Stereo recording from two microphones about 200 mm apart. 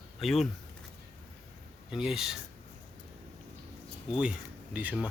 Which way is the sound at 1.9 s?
Centre (ahead or behind).